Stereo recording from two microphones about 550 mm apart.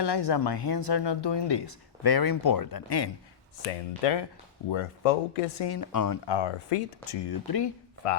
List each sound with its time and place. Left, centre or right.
0.0 s speech: left
4.0 s speech: left
4.7 s speech: left
5.5 s speech: left
7.3 s speech: left
8.0 s speech: left